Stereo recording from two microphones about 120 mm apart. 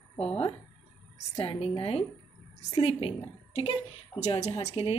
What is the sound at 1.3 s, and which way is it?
Speech, 55° left (ahead or behind).